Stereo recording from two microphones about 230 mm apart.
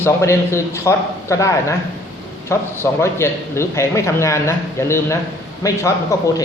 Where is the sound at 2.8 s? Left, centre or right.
Centre.